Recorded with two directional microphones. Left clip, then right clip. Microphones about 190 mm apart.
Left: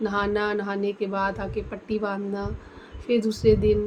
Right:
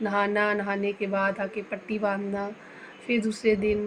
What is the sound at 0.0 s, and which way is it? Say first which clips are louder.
A woman's voice: even; 10° left (ahead or behind).